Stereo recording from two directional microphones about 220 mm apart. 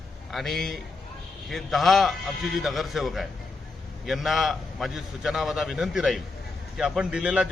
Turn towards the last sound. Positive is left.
turn(degrees=-5)  # may be behind; listen again after turning